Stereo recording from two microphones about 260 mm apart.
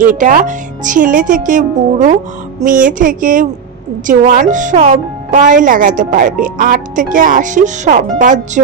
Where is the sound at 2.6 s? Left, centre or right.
Right.